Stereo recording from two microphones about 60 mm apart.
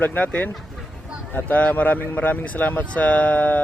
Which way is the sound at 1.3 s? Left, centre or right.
Left.